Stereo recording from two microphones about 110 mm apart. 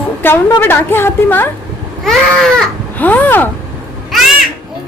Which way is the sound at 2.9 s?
15° left (ahead or behind).